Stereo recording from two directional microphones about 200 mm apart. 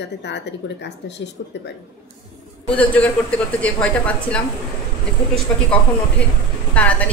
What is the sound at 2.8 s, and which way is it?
Speech, 5° left (ahead or behind).